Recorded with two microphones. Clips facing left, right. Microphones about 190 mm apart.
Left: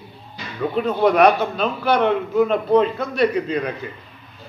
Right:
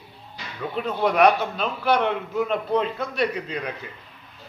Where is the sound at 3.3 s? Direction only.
45° left (ahead or behind).